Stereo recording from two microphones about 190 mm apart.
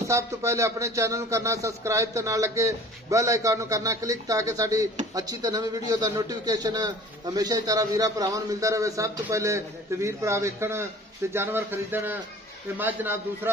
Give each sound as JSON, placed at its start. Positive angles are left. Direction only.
{"t": 0.0, "sound": "a man's voice", "side_deg": -15}